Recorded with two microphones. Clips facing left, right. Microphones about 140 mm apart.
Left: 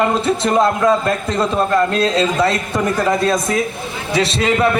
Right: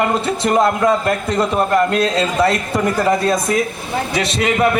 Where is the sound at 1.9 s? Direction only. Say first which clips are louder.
Left 1 dB; 25° left (ahead or behind).